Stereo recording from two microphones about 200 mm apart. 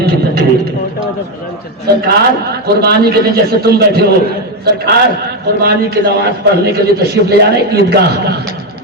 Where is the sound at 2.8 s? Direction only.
50° right (ahead or behind).